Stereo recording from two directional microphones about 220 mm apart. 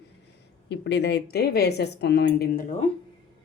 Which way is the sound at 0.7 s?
50° left (ahead or behind).